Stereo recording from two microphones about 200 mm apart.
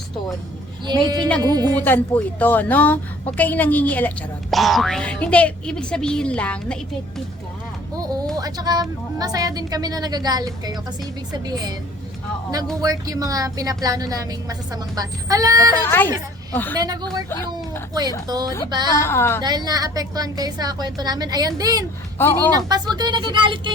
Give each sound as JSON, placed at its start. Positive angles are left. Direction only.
{"t": 0.9, "sound": "a woman's voice", "side_deg": -20}
{"t": 1.7, "sound": "speech", "side_deg": 10}
{"t": 7.9, "sound": "a sound", "side_deg": -20}
{"t": 8.4, "sound": "a woman's voice", "side_deg": -20}
{"t": 12.8, "sound": "a woman's voice", "side_deg": -20}
{"t": 15.8, "sound": "speech", "side_deg": 10}
{"t": 16.7, "sound": "a woman's voice", "side_deg": -20}
{"t": 18.3, "sound": "a woman's voice", "side_deg": -20}
{"t": 18.9, "sound": "speech", "side_deg": 10}
{"t": 19.4, "sound": "a woman's voice", "side_deg": -20}
{"t": 22.2, "sound": "speech", "side_deg": 10}
{"t": 22.4, "sound": "a woman's voice", "side_deg": -20}